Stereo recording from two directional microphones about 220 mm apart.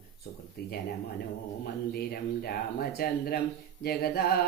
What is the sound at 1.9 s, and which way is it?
Mantra, 45° left (ahead or behind).